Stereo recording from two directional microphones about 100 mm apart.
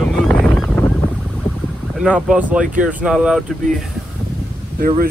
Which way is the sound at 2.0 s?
10° right (ahead or behind).